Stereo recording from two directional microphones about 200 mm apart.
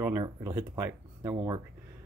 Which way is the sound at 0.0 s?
15° right (ahead or behind).